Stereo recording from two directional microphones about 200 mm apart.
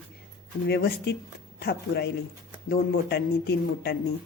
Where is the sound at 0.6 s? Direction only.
55° left (ahead or behind).